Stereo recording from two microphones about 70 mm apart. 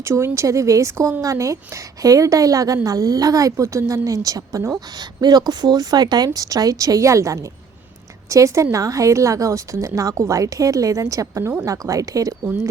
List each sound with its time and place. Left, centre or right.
0.0 s a woman's voice: right
4.9 s a woman's voice: right